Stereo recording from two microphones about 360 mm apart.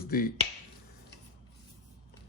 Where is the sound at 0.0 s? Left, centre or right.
Left.